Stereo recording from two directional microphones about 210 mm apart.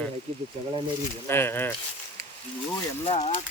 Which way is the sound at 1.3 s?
10° left (ahead or behind).